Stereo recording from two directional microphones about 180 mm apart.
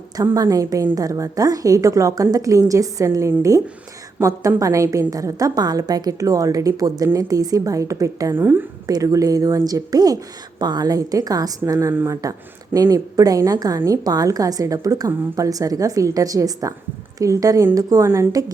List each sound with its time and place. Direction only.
0.2 s a woman's voice: 20° right (ahead or behind)